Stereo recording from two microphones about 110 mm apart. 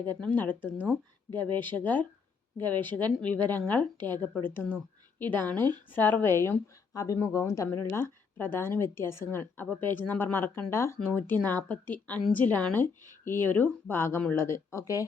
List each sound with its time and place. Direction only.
0.0 s speech: 15° left (ahead or behind)